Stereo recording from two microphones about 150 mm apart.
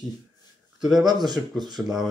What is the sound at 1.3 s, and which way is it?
Speech, 25° right (ahead or behind).